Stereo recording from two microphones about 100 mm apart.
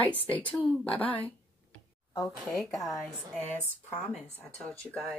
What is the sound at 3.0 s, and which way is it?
Speech, 15° left (ahead or behind).